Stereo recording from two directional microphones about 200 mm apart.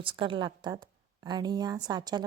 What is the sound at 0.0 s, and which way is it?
A woman's voice, 25° right (ahead or behind).